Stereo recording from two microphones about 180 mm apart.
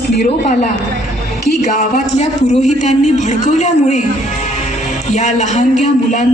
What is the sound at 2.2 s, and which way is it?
A man's voice, 40° left (ahead or behind).